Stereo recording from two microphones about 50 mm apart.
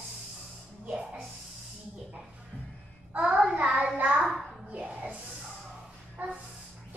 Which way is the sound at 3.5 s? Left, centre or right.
Right.